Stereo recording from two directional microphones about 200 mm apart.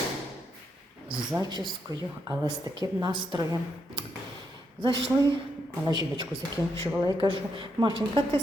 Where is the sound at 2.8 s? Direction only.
20° right (ahead or behind).